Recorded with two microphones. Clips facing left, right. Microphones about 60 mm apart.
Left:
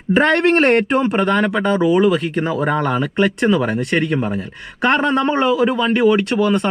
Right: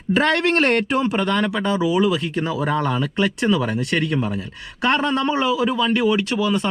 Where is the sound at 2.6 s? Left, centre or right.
Left.